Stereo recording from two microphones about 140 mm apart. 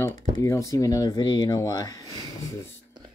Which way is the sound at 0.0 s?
20° left (ahead or behind).